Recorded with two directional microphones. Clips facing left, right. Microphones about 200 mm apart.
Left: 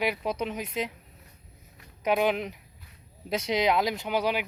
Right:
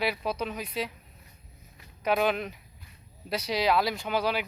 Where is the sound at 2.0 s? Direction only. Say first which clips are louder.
Left 1 dB; 15° left (ahead or behind).